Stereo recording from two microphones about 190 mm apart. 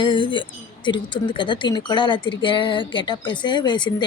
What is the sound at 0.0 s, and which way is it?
Speech, 25° left (ahead or behind).